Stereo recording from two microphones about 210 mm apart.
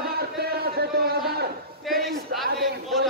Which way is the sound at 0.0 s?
50° right (ahead or behind).